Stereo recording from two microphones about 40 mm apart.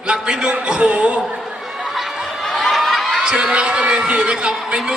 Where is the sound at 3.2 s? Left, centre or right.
Right.